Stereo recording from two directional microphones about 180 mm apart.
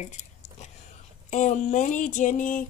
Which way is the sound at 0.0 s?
40° left (ahead or behind).